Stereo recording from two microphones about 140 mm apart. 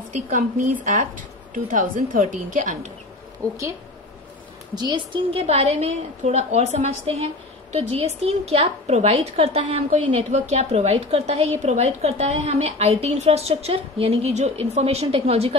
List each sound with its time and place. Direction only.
0.3 s a woman's voice: 70° right (ahead or behind)
4.7 s a woman's voice: 30° right (ahead or behind)